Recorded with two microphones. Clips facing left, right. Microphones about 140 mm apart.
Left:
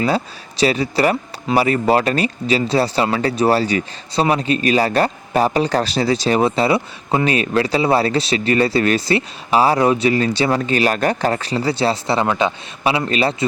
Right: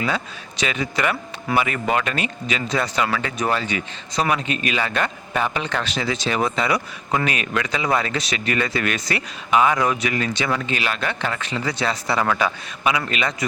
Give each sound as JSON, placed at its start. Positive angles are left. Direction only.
{"t": 0.0, "sound": "speech", "side_deg": 35}